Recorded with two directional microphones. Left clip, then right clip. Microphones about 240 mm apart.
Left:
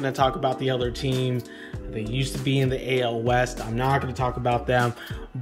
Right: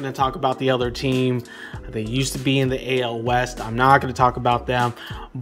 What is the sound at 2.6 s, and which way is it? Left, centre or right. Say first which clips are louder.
Speech: right 2 dB; centre.